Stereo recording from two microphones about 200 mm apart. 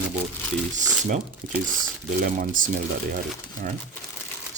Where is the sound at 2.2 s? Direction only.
40° right (ahead or behind).